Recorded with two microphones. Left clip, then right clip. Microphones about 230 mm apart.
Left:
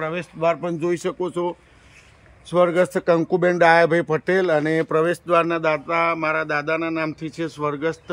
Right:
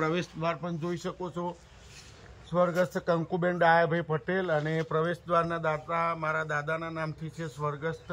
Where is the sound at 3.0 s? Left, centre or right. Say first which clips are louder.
Left 11 dB; left.